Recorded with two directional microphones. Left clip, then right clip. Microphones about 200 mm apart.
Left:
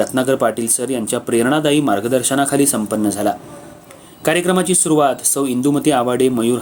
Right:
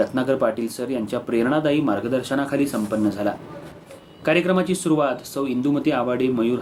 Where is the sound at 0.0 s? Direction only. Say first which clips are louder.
Left 4 dB; 40° left (ahead or behind).